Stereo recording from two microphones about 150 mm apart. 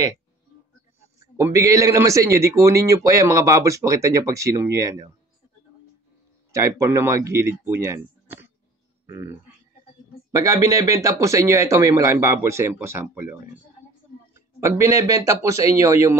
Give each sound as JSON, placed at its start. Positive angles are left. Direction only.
{"t": 1.2, "sound": "a man's voice", "side_deg": -20}
{"t": 6.5, "sound": "a man's voice", "side_deg": -20}
{"t": 10.3, "sound": "a man's voice", "side_deg": -20}